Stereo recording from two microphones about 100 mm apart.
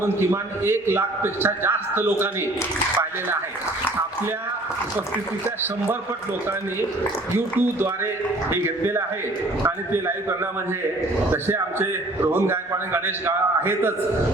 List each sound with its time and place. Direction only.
0.0 s a man's voice: 25° right (ahead or behind)
7.3 s a man's voice: 20° right (ahead or behind)